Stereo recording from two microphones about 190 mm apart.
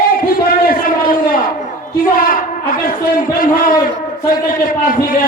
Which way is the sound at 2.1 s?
50° left (ahead or behind).